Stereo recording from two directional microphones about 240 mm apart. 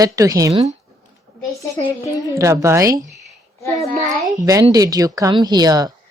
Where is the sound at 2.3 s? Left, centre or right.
Centre.